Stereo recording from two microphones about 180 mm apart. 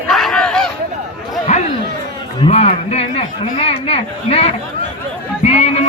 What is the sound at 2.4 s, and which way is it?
Speech, 35° left (ahead or behind).